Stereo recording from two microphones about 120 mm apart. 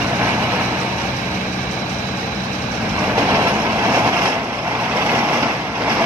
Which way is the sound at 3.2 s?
20° right (ahead or behind).